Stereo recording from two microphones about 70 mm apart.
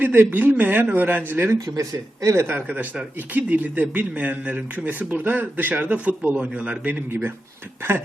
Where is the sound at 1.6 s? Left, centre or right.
Right.